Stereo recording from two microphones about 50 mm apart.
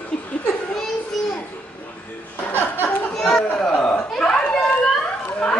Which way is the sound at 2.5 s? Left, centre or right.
Left.